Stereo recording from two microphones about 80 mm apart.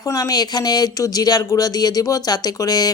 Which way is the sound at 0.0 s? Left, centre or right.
Left.